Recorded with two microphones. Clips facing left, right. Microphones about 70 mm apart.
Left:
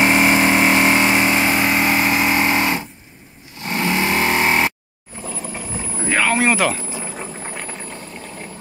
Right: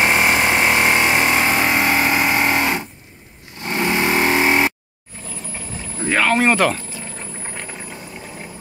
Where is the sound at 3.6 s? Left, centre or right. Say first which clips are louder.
Right 1 dB; centre.